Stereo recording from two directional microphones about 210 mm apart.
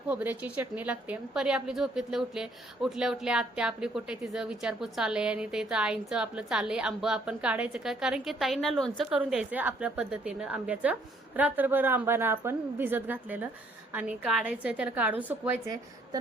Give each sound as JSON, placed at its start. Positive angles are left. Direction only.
{"t": 0.1, "sound": "a woman's voice", "side_deg": -5}